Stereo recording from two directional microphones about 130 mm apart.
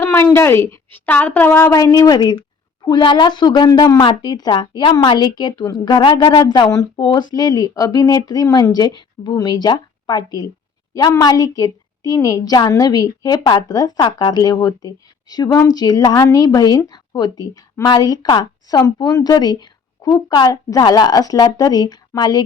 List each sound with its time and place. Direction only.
0.0 s a woman's voice: 20° left (ahead or behind)